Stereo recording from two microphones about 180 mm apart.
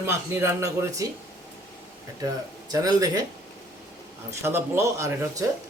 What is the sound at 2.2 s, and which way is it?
Speech, 20° right (ahead or behind).